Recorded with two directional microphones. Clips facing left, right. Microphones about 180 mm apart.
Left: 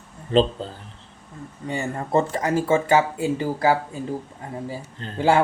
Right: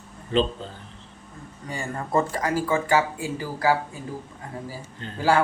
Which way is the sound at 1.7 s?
25° left (ahead or behind).